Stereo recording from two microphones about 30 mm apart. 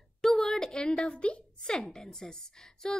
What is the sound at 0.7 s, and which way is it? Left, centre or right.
A woman's voice, left.